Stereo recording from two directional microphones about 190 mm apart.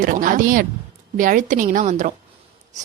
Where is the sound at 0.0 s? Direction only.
45° right (ahead or behind).